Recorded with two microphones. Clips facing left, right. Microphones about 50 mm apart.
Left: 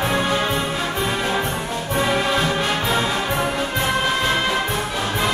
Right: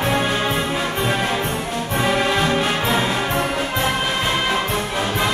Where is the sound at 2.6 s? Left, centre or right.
Centre.